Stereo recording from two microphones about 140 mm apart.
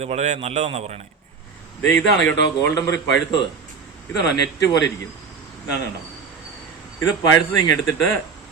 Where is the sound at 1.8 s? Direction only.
10° left (ahead or behind).